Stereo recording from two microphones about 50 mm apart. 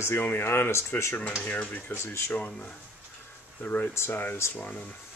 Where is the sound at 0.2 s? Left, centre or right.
Left.